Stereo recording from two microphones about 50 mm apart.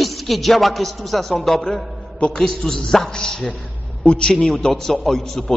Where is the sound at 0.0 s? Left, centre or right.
Centre.